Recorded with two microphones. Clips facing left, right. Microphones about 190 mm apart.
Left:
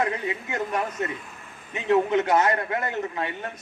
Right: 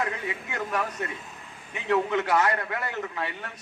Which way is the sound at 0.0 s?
20° left (ahead or behind).